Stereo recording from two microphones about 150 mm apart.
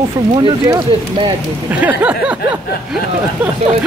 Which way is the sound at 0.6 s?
25° right (ahead or behind).